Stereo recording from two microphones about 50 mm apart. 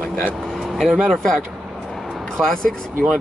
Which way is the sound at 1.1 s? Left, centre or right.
Centre.